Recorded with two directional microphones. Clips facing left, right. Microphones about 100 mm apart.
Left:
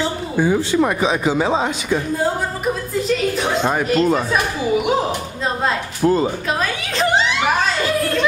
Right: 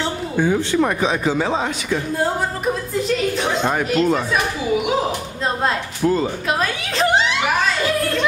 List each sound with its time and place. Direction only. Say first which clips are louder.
0.0 s speech: left 1 dB; 5° left (ahead or behind); by 2.0 s 20° left (ahead or behind)
3.3 s a woman's voice: left 1 dB; 5° left (ahead or behind)
4.0 s speech: even; 35° left (ahead or behind)
6.0 s speech: left 2 dB; 30° left (ahead or behind)
6.6 s a woman's voice: even; centre (ahead or behind)